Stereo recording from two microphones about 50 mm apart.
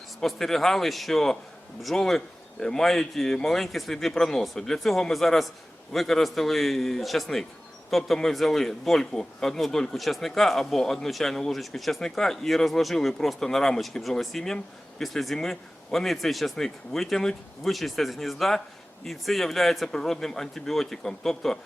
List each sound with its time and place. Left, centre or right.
0.2 s a man's voice: centre